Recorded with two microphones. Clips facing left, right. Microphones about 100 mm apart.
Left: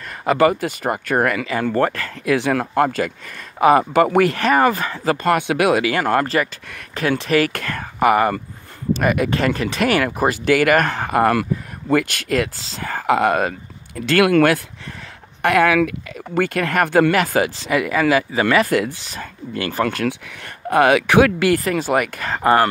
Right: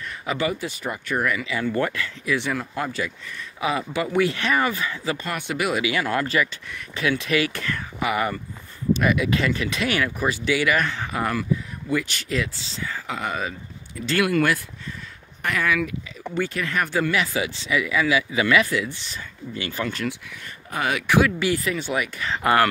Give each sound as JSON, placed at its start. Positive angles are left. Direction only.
{"t": 0.2, "sound": "speech", "side_deg": 55}
{"t": 2.5, "sound": "speech", "side_deg": 75}
{"t": 5.3, "sound": "speech", "side_deg": 70}
{"t": 6.2, "sound": "speech", "side_deg": 40}
{"t": 16.3, "sound": "speech", "side_deg": 60}
{"t": 19.0, "sound": "speech", "side_deg": 50}
{"t": 20.7, "sound": "speech", "side_deg": 75}
{"t": 22.4, "sound": "speech", "side_deg": 35}